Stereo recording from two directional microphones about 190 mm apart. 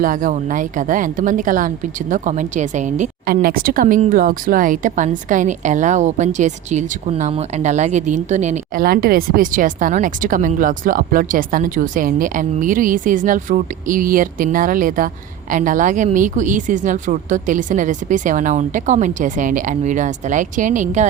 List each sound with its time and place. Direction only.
0.0 s a woman's voice: 45° right (ahead or behind)